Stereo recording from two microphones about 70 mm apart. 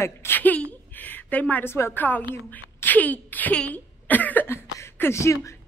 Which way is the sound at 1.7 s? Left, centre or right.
Left.